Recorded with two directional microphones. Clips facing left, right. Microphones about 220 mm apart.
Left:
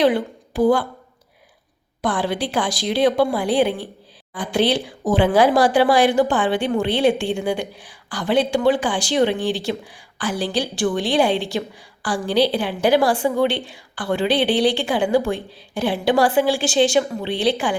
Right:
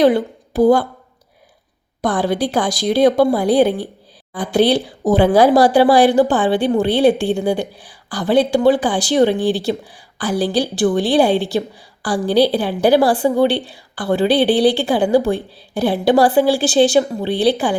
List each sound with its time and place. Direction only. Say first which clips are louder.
0.0 s a woman's voice: right 4 dB; 40° right (ahead or behind)
2.0 s a woman's voice: right 4 dB; 40° right (ahead or behind)